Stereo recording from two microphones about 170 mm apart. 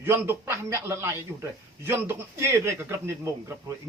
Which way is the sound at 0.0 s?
15° right (ahead or behind).